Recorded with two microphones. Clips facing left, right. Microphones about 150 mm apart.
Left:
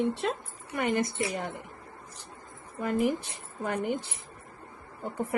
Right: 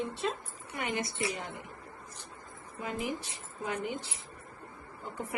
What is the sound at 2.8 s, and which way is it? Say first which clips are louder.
Speech: left 8 dB; 55° left (ahead or behind).